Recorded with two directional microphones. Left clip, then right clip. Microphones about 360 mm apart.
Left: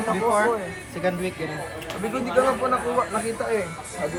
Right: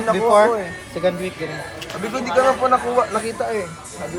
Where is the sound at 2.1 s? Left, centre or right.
Right.